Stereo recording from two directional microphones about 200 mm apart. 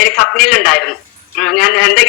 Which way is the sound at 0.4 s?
50° left (ahead or behind).